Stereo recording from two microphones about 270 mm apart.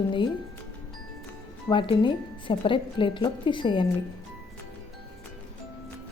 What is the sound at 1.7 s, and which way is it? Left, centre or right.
A woman's voice, centre.